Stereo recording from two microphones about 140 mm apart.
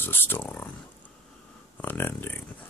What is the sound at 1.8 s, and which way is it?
Speech, 15° left (ahead or behind).